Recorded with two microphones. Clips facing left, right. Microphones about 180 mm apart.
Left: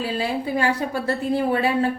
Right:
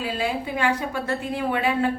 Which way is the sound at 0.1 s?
35° left (ahead or behind).